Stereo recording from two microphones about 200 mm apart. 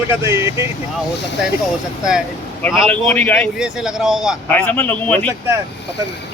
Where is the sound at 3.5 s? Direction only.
5° right (ahead or behind).